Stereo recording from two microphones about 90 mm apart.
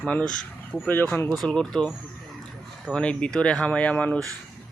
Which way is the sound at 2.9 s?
10° left (ahead or behind).